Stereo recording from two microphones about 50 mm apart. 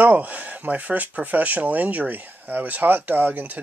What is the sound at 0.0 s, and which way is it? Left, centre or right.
Speech, right.